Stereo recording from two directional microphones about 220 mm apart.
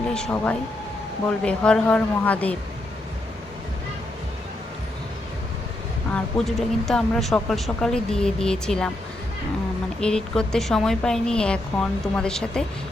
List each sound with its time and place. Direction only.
0.1 s a woman's voice: 5° left (ahead or behind)
6.1 s a woman's voice: centre (ahead or behind)
10.0 s a woman's voice: 5° left (ahead or behind)